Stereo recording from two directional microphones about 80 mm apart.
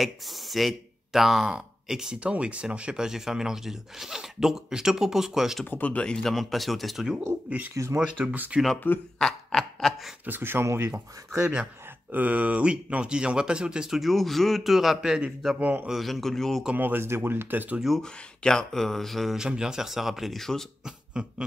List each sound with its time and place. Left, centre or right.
0.0 s speech: centre
5.7 s speech: centre
7.4 s speech: centre
7.7 s speech: right
8.2 s speech: centre
8.7 s speech: left
9.2 s a sound: centre
10.2 s speech: right
11.3 s speech: centre
15.9 s speech: centre
16.7 s speech: right
17.7 s speech: centre
18.0 s speech: centre
20.8 s a sound: centre